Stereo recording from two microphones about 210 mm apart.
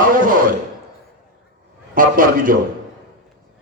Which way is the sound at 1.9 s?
40° right (ahead or behind).